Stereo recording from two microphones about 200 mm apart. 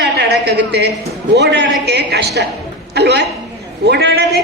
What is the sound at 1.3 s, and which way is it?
A woman's voice, 60° right (ahead or behind).